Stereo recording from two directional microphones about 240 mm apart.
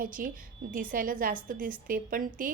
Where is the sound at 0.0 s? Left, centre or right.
Right.